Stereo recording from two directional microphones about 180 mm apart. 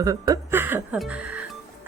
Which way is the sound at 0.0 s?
20° right (ahead or behind).